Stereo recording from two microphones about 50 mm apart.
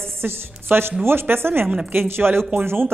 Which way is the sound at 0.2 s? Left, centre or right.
Right.